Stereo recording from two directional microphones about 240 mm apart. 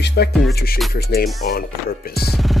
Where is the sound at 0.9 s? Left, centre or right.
Left.